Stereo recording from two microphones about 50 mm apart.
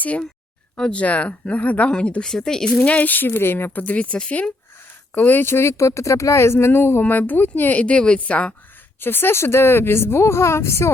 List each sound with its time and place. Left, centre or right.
0.0 s a woman's voice: left; by 2.8 s centre
2.8 s speech: left
3.7 s a woman's voice: left
5.1 s speech: left
7.0 s speech: left
7.8 s a woman's voice: left
9.0 s speech: left